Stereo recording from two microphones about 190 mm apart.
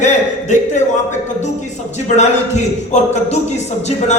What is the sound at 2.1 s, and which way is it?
A man's voice, 35° left (ahead or behind).